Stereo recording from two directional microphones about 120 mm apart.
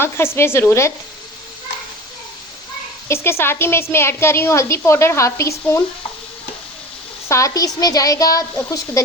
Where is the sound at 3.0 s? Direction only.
20° left (ahead or behind).